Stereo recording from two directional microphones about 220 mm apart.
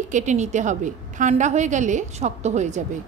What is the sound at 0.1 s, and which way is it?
A woman's voice, 35° right (ahead or behind).